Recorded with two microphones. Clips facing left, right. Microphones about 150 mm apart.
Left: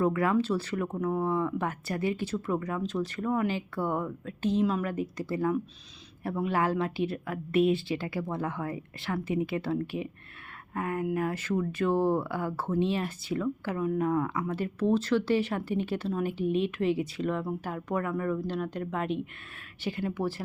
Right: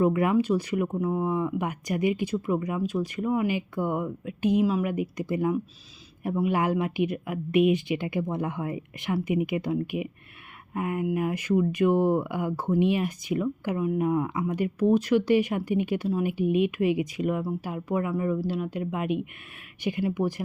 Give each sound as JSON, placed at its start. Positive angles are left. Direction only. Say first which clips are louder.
{"t": 0.0, "sound": "speech", "louder": "right 3 dB", "side_deg": -20}